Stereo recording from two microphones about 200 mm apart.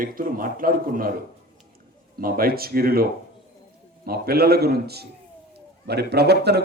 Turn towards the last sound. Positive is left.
turn(degrees=-55)  # may be behind; listen again after turning